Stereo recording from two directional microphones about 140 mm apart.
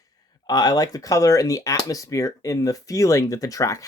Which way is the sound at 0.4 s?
30° left (ahead or behind).